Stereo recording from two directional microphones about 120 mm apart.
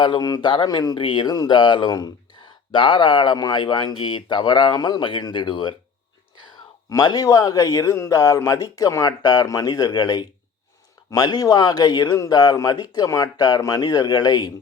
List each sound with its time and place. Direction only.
0.0 s a man's voice: 40° left (ahead or behind)
2.7 s a man's voice: 45° left (ahead or behind)
6.9 s a man's voice: 35° left (ahead or behind)